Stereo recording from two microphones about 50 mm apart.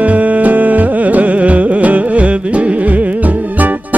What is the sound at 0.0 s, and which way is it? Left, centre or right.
Music, right.